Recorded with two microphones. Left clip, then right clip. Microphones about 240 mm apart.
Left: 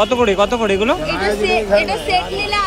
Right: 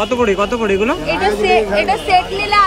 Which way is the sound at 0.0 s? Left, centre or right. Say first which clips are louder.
Left 1 dB; centre.